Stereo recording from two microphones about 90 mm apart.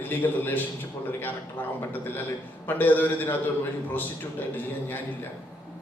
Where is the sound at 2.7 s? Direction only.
20° left (ahead or behind).